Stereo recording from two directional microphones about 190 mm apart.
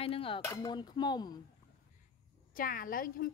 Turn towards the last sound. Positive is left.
turn(degrees=50)  # may be behind; listen again after turning